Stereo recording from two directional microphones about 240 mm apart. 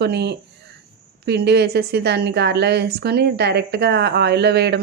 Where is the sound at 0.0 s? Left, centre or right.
Right.